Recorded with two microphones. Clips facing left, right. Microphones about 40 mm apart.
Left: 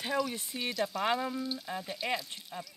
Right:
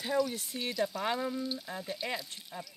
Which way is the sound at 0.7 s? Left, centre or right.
Centre.